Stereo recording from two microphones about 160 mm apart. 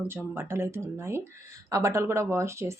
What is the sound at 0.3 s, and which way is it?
Speech, 15° right (ahead or behind).